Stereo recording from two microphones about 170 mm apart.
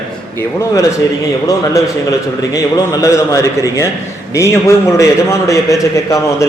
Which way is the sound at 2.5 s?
20° left (ahead or behind).